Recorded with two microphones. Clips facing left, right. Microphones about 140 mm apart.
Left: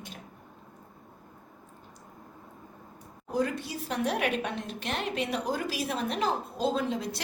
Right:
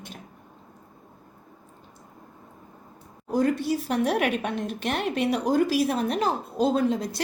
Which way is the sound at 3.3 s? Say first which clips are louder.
Right 7 dB; 45° right (ahead or behind).